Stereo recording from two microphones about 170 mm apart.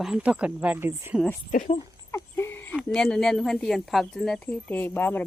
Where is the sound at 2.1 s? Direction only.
15° left (ahead or behind).